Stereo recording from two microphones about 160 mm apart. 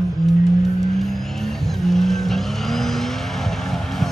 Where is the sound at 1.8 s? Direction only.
Centre (ahead or behind).